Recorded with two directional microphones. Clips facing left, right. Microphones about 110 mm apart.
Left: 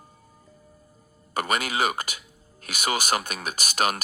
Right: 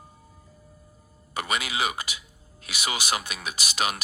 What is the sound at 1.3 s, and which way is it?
Speech, 45° left (ahead or behind).